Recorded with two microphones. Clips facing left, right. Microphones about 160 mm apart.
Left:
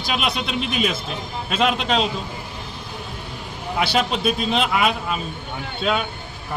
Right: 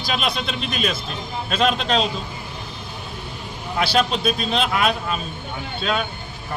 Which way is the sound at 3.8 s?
15° left (ahead or behind).